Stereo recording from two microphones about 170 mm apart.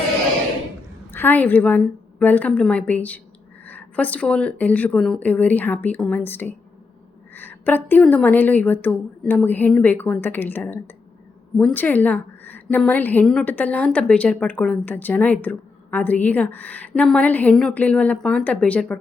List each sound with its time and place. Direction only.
1.1 s a woman's voice: 10° left (ahead or behind)